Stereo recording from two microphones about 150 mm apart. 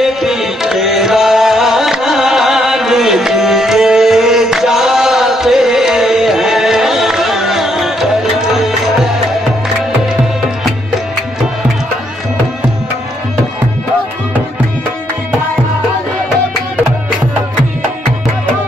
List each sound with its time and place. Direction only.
0.0 s tabla: centre (ahead or behind)